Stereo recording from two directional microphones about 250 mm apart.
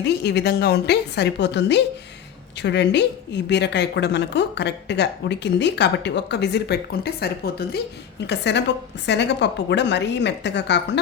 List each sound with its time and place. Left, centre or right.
0.0 s a woman's voice: left